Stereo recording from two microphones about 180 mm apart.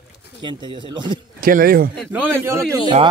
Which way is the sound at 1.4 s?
55° right (ahead or behind).